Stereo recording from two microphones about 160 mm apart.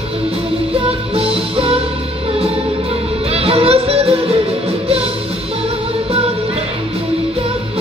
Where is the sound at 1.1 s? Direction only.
35° right (ahead or behind).